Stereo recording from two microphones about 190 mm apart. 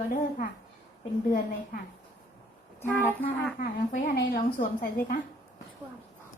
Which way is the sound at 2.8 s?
10° left (ahead or behind).